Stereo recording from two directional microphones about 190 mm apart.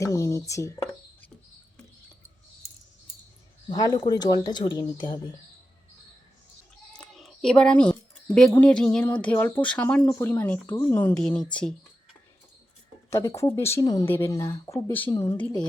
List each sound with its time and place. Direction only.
0.0 s speech: 15° left (ahead or behind)
3.7 s speech: 20° left (ahead or behind)
6.9 s a sound: 5° left (ahead or behind)
8.4 s speech: 5° left (ahead or behind)
13.1 s speech: 15° left (ahead or behind)